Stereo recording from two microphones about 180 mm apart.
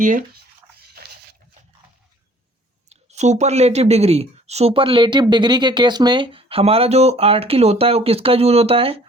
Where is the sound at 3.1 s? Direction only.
40° right (ahead or behind).